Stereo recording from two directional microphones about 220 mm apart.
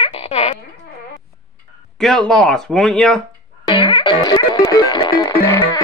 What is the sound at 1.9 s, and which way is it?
Speech, centre (ahead or behind).